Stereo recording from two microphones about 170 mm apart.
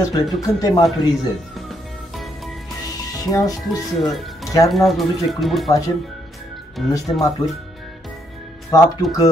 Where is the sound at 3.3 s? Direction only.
20° left (ahead or behind).